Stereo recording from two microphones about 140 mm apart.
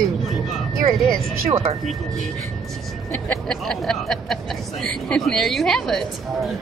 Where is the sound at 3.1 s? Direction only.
5° left (ahead or behind).